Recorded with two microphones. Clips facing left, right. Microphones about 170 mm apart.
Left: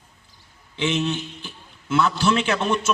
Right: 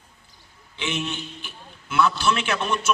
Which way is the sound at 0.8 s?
20° left (ahead or behind).